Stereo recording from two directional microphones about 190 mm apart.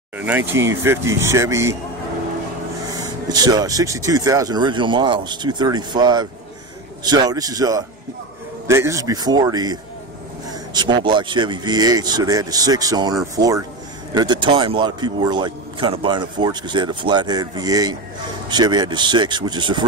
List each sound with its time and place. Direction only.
0.2 s speech: 10° right (ahead or behind)
2.9 s a man's voice: 20° right (ahead or behind)